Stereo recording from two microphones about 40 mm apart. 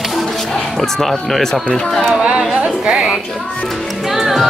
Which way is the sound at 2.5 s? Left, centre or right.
Right.